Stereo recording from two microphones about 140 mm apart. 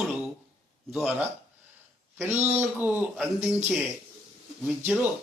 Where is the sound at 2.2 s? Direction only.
15° right (ahead or behind).